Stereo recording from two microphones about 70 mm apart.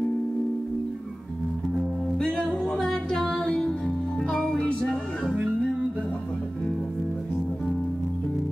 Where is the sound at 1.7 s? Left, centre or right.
Centre.